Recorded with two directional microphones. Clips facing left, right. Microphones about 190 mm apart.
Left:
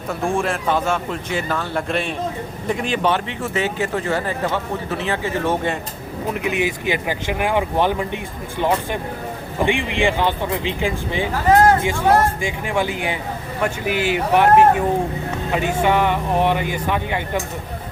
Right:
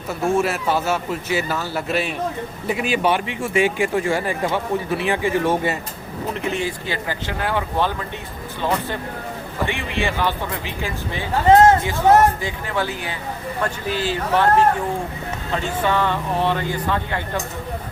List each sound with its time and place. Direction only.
0.3 s speech: 5° right (ahead or behind)
6.3 s speech: 10° left (ahead or behind)
9.6 s speech: 15° left (ahead or behind)
11.4 s speech: 25° right (ahead or behind)
12.5 s speech: 15° left (ahead or behind)